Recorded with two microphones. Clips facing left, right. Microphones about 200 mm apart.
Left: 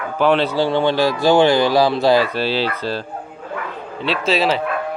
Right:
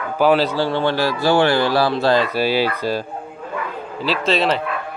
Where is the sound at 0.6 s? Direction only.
15° left (ahead or behind).